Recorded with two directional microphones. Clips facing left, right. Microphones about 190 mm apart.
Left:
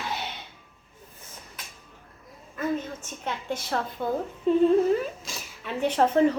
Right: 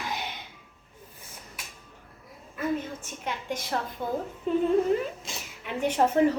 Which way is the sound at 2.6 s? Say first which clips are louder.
Left 1 dB; 10° right (ahead or behind).